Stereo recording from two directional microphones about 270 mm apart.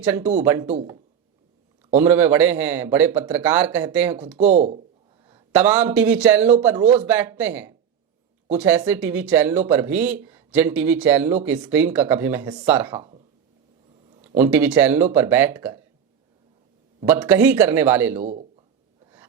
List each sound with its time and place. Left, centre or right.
0.0 s speech: centre
2.0 s speech: centre
4.4 s speech: right
5.5 s speech: centre
13.0 s speech: centre
14.3 s speech: centre
17.1 s speech: centre
18.2 s speech: right